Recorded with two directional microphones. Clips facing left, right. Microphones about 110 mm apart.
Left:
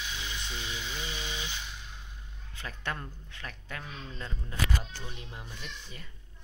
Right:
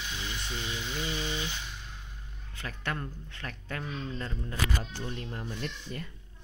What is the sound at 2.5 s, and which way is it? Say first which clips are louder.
Speech: right 1 dB; 15° left (ahead or behind).